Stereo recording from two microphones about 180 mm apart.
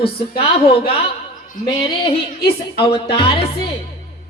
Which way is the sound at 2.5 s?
30° left (ahead or behind).